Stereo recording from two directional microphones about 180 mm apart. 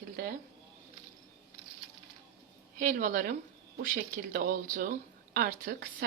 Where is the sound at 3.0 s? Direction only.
45° right (ahead or behind).